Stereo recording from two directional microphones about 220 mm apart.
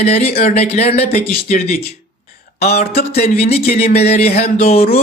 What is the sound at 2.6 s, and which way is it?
Speech, 30° left (ahead or behind).